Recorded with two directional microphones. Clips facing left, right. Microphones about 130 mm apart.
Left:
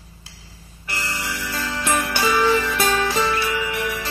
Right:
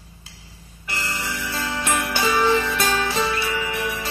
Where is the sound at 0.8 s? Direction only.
20° right (ahead or behind).